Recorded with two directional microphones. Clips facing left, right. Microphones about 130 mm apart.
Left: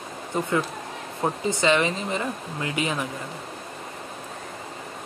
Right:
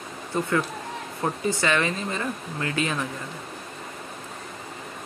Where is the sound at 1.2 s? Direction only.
20° left (ahead or behind).